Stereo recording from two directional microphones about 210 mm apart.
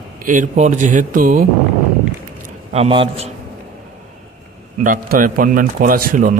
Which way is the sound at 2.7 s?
25° right (ahead or behind).